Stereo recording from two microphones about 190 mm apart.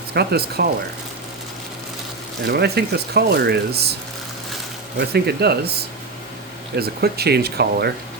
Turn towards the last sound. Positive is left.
turn(degrees=-55)  # may be behind; listen again after turning